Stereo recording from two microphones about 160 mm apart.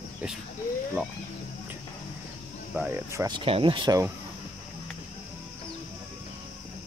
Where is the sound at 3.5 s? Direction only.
35° right (ahead or behind).